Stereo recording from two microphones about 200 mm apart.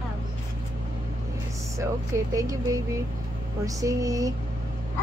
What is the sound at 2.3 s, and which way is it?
A woman's voice, 15° right (ahead or behind).